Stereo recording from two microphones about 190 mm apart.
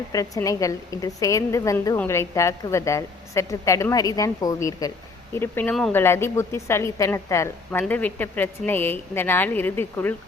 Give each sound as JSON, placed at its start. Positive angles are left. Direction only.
{"t": 0.1, "sound": "a woman's voice", "side_deg": 15}